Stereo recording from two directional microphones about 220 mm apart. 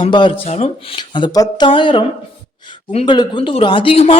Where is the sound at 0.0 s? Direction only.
20° left (ahead or behind).